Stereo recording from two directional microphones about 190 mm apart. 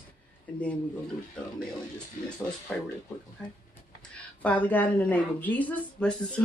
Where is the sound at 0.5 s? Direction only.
5° left (ahead or behind).